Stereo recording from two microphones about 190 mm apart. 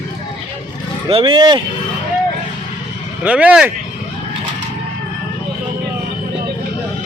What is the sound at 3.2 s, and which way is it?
Speech, 5° right (ahead or behind).